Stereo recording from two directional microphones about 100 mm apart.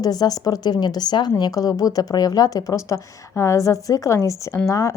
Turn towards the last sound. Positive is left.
turn(degrees=35)  # may be behind; listen again after turning